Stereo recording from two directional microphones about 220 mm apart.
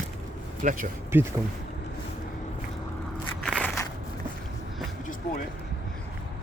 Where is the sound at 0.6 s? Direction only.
35° right (ahead or behind).